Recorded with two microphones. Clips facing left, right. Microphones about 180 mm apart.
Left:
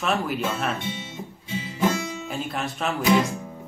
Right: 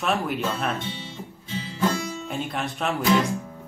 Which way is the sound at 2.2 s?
Centre (ahead or behind).